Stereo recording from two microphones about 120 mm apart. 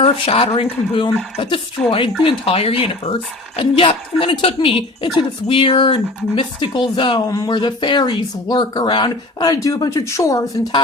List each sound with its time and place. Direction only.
0.0 s a woman's voice: 55° left (ahead or behind)
7.3 s speech: 30° left (ahead or behind)
7.5 s speech: 40° left (ahead or behind)